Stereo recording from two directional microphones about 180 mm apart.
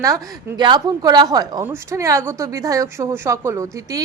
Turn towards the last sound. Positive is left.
turn(degrees=-15)  # may be behind; listen again after turning